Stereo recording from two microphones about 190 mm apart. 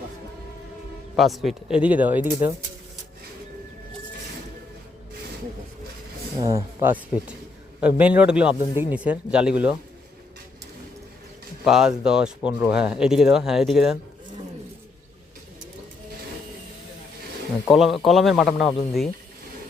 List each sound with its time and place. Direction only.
1.1 s speech: centre (ahead or behind)
6.4 s speech: 15° right (ahead or behind)
11.6 s speech: 5° right (ahead or behind)
17.7 s speech: centre (ahead or behind)